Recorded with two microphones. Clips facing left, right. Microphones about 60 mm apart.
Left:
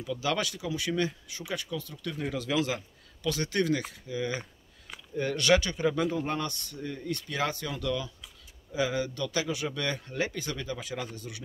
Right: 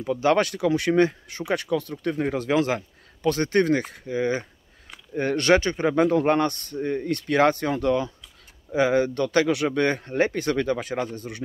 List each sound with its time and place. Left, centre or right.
0.0 s speech: right
9.8 s speech: right